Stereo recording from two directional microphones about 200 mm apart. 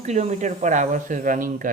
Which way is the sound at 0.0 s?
35° right (ahead or behind).